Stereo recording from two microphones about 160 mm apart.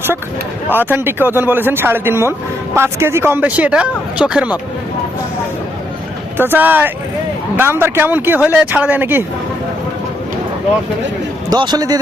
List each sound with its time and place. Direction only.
0.7 s a man's voice: 10° right (ahead or behind)
6.3 s a man's voice: 15° right (ahead or behind)
11.5 s a man's voice: 25° right (ahead or behind)